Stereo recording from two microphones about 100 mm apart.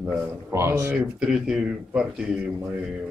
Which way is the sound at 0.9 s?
10° right (ahead or behind).